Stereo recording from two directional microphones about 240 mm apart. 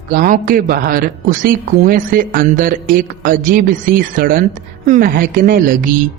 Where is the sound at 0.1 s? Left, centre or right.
Right.